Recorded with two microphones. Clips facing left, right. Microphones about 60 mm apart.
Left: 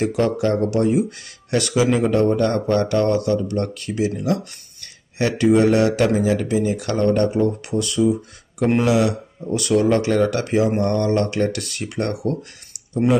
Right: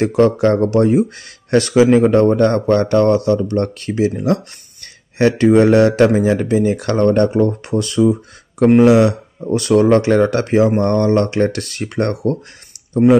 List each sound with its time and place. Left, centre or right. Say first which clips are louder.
0.1 s speech: right 6 dB; right
4.1 s speech: right 5 dB; right
5.2 s speech: right 5 dB; right